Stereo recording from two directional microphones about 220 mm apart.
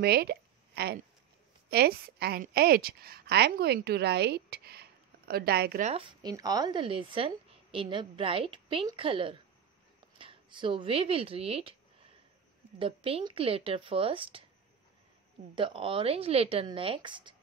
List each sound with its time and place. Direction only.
0.0 s a woman's voice: 45° right (ahead or behind)
5.9 s speech: 20° right (ahead or behind)
12.7 s speech: 25° right (ahead or behind)
15.5 s speech: 25° right (ahead or behind)